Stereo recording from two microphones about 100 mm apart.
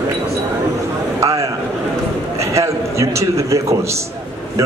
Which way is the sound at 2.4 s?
30° right (ahead or behind).